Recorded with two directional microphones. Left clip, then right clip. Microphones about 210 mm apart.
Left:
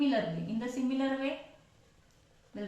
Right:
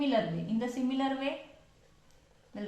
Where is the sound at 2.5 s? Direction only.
40° right (ahead or behind).